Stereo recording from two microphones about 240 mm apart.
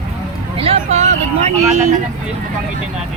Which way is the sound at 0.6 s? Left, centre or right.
Right.